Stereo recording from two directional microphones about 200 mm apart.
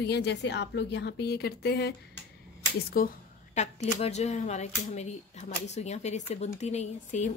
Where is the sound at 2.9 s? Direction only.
45° left (ahead or behind).